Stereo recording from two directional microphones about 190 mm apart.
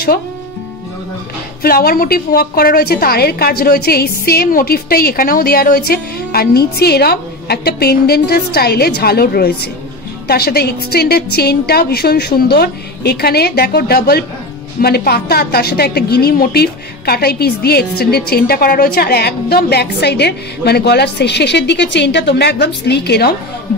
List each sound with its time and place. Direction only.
1.6 s a woman's voice: 50° left (ahead or behind)